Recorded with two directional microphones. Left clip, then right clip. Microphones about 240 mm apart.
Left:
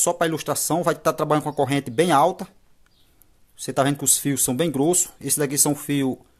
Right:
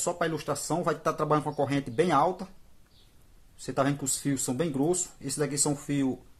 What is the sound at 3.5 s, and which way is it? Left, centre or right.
Speech, left.